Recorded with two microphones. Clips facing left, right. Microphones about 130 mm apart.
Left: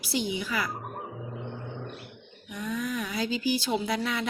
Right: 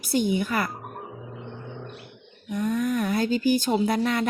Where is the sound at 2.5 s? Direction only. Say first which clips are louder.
Right 7 dB; 50° right (ahead or behind).